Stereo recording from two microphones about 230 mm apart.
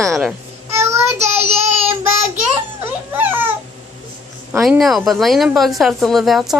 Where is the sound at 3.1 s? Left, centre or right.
Centre.